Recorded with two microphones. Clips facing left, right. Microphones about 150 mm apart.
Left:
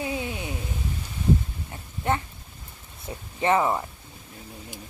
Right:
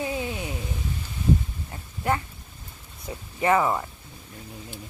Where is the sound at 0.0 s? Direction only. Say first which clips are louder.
Right 1 dB; 20° left (ahead or behind).